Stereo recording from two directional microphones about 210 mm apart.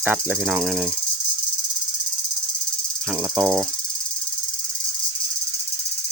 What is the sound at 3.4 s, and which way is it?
Cricket, 15° right (ahead or behind).